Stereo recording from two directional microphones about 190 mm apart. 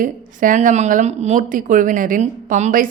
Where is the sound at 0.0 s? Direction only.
45° right (ahead or behind).